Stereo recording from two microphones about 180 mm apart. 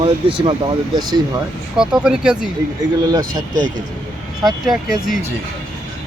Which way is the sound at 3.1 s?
20° right (ahead or behind).